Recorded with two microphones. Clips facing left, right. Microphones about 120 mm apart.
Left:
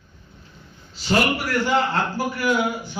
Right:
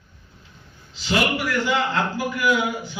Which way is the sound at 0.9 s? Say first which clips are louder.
Left 4 dB; 40° left (ahead or behind).